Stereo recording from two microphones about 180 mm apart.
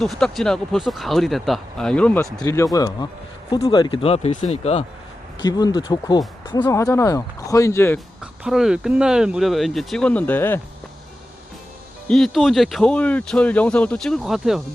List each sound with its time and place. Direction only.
0.0 s speech: centre (ahead or behind); by 4.9 s 35° left (ahead or behind)
5.4 s speech: 20° left (ahead or behind)
7.9 s speech: 5° right (ahead or behind)
12.0 s speech: 5° left (ahead or behind)